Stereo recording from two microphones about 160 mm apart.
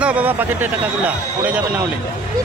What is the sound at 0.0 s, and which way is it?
Speech, 10° right (ahead or behind).